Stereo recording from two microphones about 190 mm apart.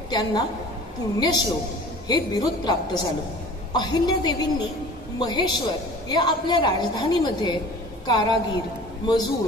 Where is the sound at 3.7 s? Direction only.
20° left (ahead or behind).